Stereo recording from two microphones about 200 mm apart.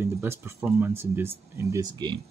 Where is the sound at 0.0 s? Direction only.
10° right (ahead or behind).